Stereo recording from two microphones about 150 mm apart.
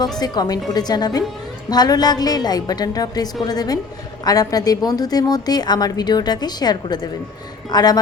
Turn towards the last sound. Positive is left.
turn(degrees=25)  # may be behind; listen again after turning